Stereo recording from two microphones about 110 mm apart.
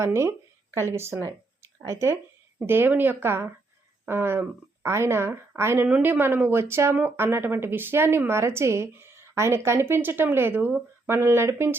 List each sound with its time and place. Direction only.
0.0 s a woman's voice: 25° right (ahead or behind)